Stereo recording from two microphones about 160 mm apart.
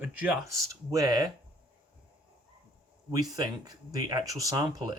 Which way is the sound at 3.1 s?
25° right (ahead or behind).